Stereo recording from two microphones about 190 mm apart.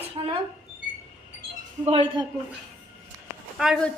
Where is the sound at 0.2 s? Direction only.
20° right (ahead or behind).